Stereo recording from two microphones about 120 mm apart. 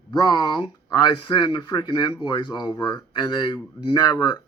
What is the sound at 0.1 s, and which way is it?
Speech, 35° left (ahead or behind).